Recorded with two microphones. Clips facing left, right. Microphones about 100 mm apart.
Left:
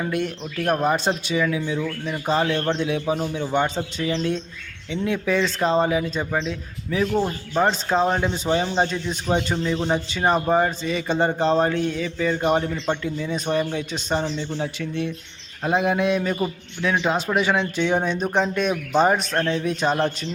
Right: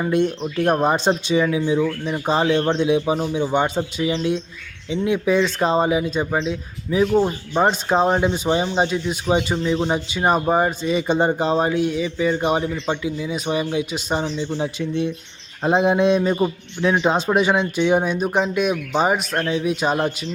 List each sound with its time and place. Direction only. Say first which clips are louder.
0.0 s speech: right 6 dB; 25° right (ahead or behind); by 20.1 s 10° right (ahead or behind)